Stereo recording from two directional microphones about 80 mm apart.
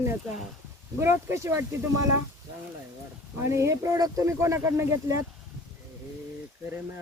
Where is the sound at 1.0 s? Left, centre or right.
Right.